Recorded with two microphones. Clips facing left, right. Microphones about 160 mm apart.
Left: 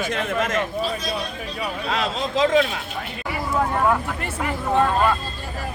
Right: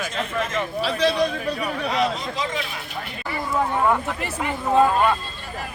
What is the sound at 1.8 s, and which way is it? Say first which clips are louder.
Speech: right 2 dB; 90° left.